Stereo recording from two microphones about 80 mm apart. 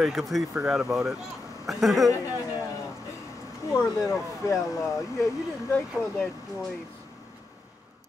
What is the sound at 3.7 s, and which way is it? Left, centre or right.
Speech, left.